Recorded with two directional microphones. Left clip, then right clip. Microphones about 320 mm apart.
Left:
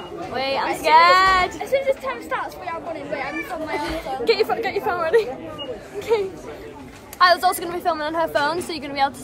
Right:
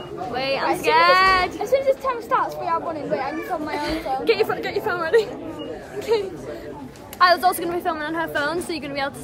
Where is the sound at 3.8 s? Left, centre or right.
Centre.